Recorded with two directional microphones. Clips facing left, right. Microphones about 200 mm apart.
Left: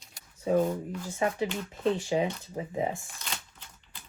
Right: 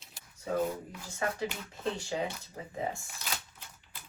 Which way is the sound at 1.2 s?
20° left (ahead or behind).